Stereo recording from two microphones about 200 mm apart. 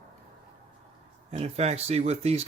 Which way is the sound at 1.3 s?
30° right (ahead or behind).